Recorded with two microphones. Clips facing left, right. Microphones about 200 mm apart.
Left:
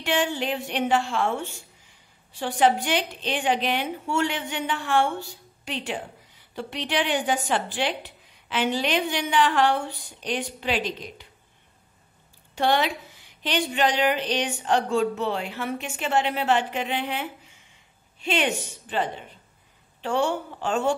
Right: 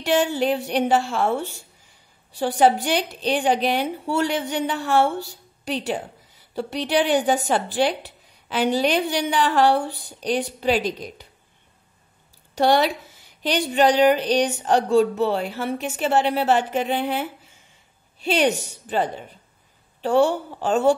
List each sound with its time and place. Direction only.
0.0 s a woman's voice: 40° right (ahead or behind)
12.5 s a woman's voice: 40° right (ahead or behind)